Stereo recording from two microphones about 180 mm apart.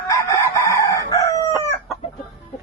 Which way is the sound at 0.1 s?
15° left (ahead or behind).